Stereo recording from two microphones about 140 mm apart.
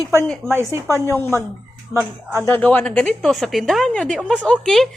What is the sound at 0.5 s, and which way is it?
Speech, 20° right (ahead or behind).